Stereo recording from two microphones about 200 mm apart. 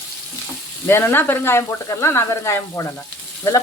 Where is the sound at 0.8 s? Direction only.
10° left (ahead or behind).